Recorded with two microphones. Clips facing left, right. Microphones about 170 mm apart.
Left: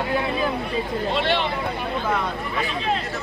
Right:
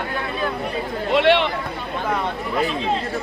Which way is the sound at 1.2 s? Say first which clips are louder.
Right 9 dB; 70° right (ahead or behind).